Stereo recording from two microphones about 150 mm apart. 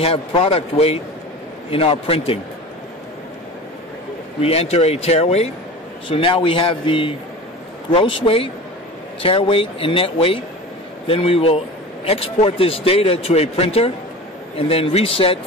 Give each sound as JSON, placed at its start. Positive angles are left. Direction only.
{"t": 0.0, "sound": "a man's voice", "side_deg": 35}
{"t": 4.4, "sound": "a man's voice", "side_deg": 40}